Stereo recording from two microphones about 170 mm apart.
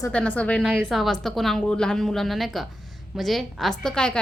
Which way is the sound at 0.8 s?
Centre (ahead or behind).